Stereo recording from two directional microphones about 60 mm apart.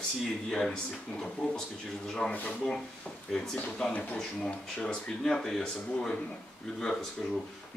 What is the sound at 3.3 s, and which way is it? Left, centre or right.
Speech, centre.